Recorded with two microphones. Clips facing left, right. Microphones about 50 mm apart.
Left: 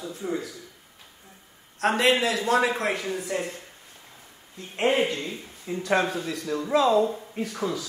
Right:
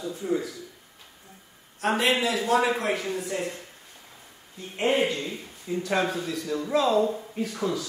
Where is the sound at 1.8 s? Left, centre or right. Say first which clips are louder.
Left 2 dB; left.